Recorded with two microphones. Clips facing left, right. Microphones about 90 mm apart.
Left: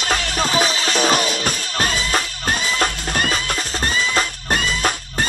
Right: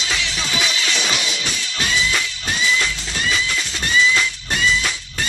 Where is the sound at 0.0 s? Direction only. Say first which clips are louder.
Left 5 dB; 45° left (ahead or behind).